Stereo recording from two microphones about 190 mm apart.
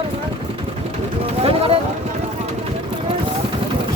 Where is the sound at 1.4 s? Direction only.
30° right (ahead or behind).